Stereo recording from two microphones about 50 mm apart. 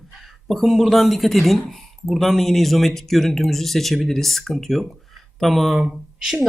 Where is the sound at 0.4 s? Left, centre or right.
Centre.